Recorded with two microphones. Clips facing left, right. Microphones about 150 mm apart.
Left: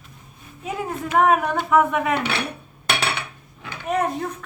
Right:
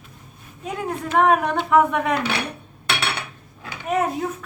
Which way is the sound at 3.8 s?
Centre (ahead or behind).